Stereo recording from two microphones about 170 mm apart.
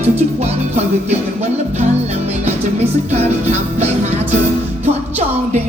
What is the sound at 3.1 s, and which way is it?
Music, 40° right (ahead or behind).